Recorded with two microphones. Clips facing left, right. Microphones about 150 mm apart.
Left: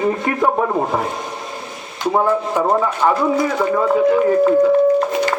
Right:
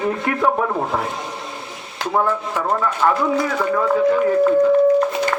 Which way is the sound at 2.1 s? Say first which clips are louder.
Left 3 dB; 15° left (ahead or behind).